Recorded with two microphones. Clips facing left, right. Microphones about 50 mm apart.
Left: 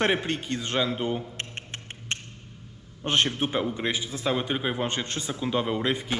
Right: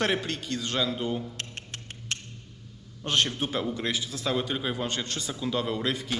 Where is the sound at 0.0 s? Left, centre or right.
Left.